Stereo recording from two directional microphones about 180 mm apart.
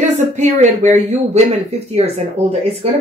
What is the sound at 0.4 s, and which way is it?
Speech, 40° right (ahead or behind).